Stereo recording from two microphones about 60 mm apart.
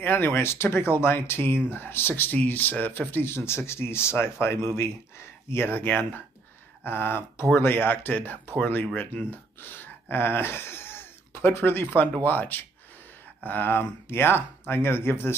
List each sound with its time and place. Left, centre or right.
0.0 s speech: left